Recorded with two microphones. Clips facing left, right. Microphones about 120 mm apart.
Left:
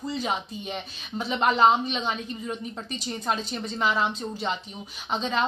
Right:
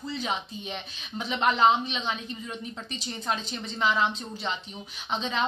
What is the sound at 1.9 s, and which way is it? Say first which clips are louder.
Speech: left 3 dB; 10° left (ahead or behind).